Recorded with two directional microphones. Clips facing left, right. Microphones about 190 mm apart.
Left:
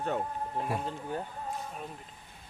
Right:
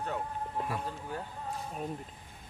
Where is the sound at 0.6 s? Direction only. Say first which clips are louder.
Left 3 dB; 25° left (ahead or behind).